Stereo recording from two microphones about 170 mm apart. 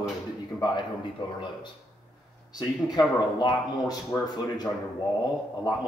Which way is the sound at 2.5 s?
25° left (ahead or behind).